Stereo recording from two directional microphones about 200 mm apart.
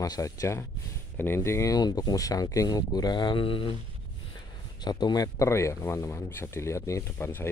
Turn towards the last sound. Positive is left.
turn(degrees=10)  # may be behind; listen again after turning